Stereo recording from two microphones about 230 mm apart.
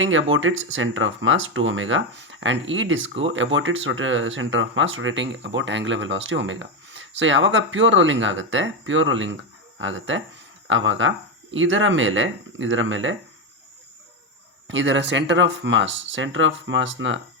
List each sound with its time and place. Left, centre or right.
0.0 s speech: right
14.7 s speech: right